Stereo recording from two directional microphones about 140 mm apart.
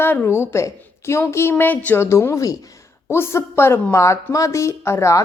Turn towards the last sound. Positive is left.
turn(degrees=20)  # may be behind; listen again after turning